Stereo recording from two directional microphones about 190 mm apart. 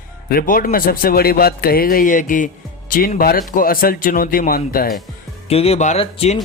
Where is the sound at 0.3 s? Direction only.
50° left (ahead or behind).